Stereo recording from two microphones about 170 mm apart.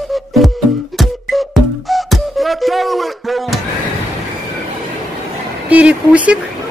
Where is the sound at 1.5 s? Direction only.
Centre (ahead or behind).